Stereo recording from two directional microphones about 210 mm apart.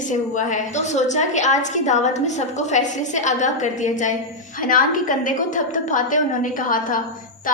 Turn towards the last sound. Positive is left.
turn(degrees=40)  # may be behind; listen again after turning